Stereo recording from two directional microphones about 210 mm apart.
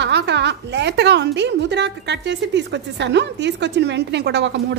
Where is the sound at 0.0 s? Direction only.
55° right (ahead or behind).